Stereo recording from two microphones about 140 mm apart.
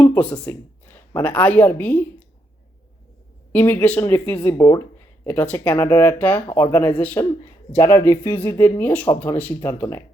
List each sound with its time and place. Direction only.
0.0 s speech: 10° left (ahead or behind)
3.5 s speech: 15° left (ahead or behind)
4.5 s speech: 25° left (ahead or behind)
4.9 s speech: 15° left (ahead or behind)